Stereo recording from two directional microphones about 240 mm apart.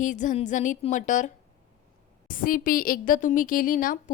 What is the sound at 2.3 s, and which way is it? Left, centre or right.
A woman's voice, left.